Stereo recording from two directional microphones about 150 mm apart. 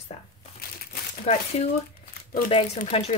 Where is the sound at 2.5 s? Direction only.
45° left (ahead or behind).